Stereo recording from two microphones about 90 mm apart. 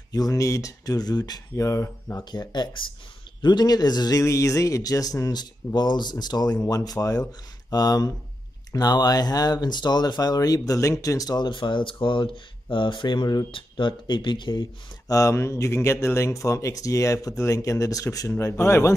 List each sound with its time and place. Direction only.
0.1 s speech: 40° left (ahead or behind)
2.3 s speech: 50° left (ahead or behind)
3.4 s speech: 50° left (ahead or behind)
4.2 s speech: 35° left (ahead or behind); by 14.7 s 60° left (ahead or behind)
15.0 s speech: 35° left (ahead or behind)